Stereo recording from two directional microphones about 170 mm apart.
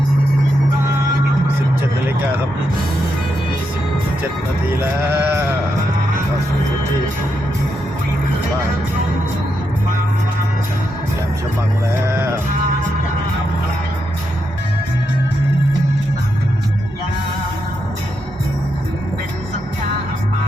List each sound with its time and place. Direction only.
4.8 s sheep: 15° right (ahead or behind)